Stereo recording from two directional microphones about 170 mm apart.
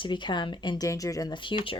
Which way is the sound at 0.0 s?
25° left (ahead or behind).